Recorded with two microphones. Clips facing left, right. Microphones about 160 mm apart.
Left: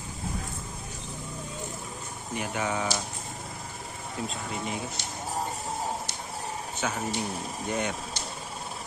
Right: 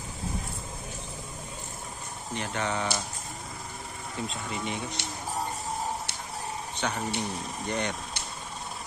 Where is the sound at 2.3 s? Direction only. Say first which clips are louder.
Left 1 dB; 10° left (ahead or behind).